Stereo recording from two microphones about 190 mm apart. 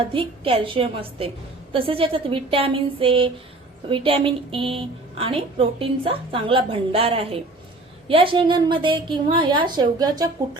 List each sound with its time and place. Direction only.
0.1 s a woman's voice: 30° right (ahead or behind)